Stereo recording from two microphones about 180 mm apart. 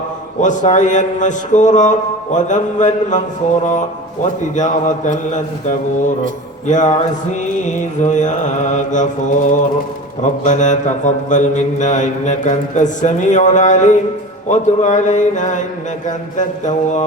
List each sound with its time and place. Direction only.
0.4 s a man's voice: 45° left (ahead or behind)